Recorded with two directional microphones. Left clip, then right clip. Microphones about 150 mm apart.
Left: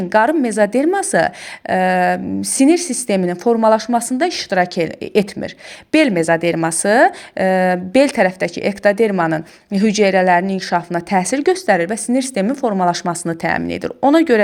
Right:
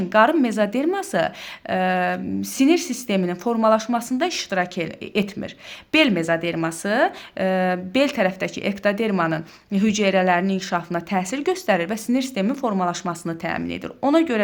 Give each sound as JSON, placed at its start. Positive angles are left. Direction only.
{"t": 0.1, "sound": "a woman's voice", "side_deg": 35}
{"t": 12.8, "sound": "a woman's voice", "side_deg": 35}